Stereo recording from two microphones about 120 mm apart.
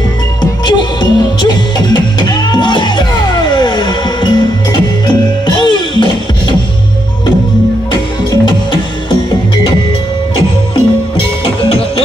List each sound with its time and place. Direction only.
0.4 s music: 35° left (ahead or behind)
7.9 s music: 40° left (ahead or behind)